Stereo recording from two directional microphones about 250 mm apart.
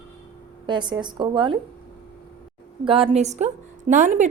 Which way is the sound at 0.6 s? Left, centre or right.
Centre.